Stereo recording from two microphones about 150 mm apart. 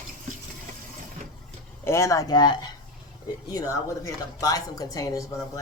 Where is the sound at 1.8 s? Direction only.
20° left (ahead or behind).